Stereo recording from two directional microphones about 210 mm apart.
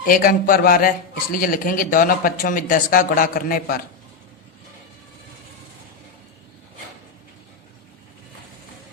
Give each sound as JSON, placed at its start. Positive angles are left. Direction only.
{"t": 0.1, "sound": "a man's voice", "side_deg": 40}